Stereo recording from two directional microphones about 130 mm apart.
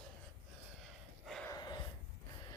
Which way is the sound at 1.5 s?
30° left (ahead or behind).